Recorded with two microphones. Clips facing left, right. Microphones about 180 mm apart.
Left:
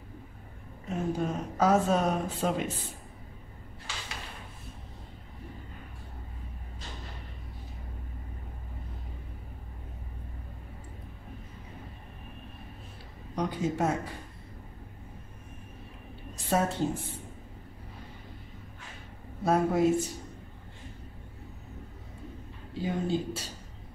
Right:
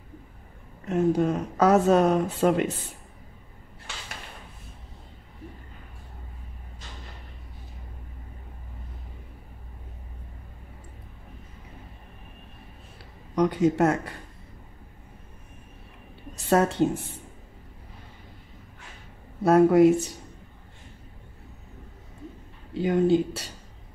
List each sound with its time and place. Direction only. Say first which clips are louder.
0.8 s speech: right 8 dB; 70° right (ahead or behind)
13.4 s speech: right 8 dB; 70° right (ahead or behind)
16.4 s speech: right 6 dB; 70° right (ahead or behind)
19.4 s speech: right 8 dB; 70° right (ahead or behind)
22.8 s speech: right 9 dB; 70° right (ahead or behind)